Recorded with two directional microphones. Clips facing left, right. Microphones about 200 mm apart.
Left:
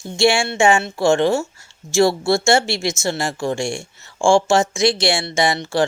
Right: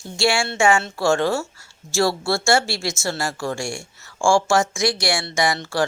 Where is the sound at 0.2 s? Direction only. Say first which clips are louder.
Left 4 dB; 20° left (ahead or behind).